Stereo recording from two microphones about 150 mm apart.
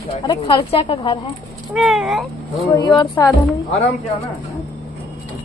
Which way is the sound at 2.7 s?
25° left (ahead or behind).